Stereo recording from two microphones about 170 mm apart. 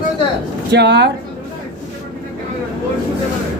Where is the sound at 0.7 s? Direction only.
85° right.